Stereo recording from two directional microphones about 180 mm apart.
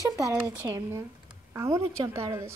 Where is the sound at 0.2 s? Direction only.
20° right (ahead or behind).